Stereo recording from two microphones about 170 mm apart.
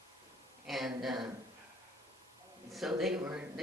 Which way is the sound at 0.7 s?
Centre (ahead or behind).